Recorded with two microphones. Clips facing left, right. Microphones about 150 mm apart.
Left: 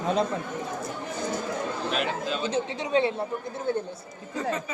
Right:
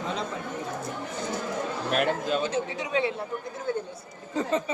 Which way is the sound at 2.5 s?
25° left (ahead or behind).